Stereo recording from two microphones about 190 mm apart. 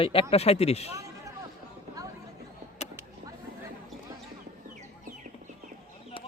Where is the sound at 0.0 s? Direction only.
30° left (ahead or behind).